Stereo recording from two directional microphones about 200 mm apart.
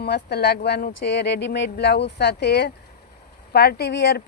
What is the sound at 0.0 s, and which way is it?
Speech, 55° left (ahead or behind).